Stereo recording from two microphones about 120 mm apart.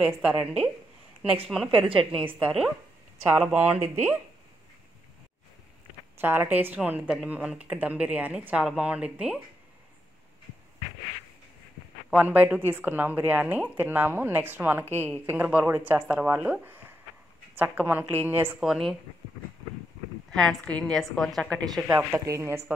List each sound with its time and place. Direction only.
0.0 s a woman's voice: 5° right (ahead or behind)
6.1 s a woman's voice: 15° right (ahead or behind)
12.1 s a woman's voice: 15° right (ahead or behind)
18.6 s a woman's voice: centre (ahead or behind)
20.2 s a woman's voice: 5° left (ahead or behind)
21.9 s speech: 25° right (ahead or behind)